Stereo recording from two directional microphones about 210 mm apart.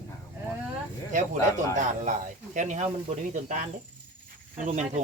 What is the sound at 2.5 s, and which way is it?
Speech, 35° right (ahead or behind).